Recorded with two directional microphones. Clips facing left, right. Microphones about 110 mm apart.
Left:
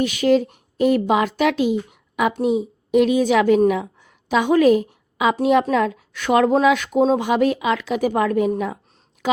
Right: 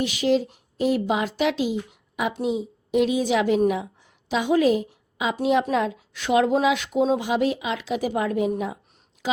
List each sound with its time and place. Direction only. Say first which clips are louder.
0.0 s a woman's voice: left 4 dB; 55° left (ahead or behind)